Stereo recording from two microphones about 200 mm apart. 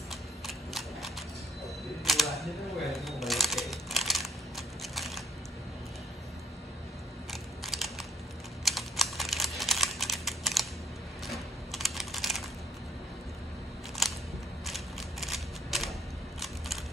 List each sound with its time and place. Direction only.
0.1 s a sound: centre (ahead or behind)
2.0 s typewriter: centre (ahead or behind)
7.6 s crushing: centre (ahead or behind)
8.6 s computer keyboard: centre (ahead or behind)
11.2 s typing: centre (ahead or behind)
14.0 s biting: centre (ahead or behind)
14.7 s typewriter: centre (ahead or behind)